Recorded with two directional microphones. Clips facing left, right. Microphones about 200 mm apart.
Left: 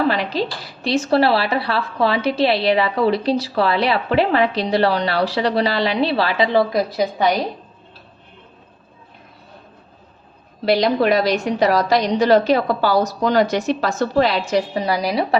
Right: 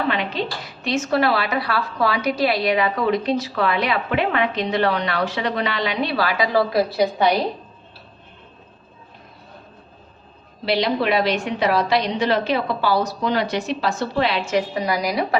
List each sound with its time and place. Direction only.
0.1 s a woman's voice: 35° left (ahead or behind); by 7.0 s 20° left (ahead or behind)
10.7 s a woman's voice: 45° left (ahead or behind); by 15.4 s 30° left (ahead or behind)